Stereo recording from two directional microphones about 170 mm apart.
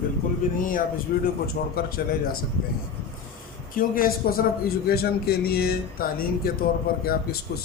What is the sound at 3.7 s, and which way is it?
A man's voice, 55° left (ahead or behind).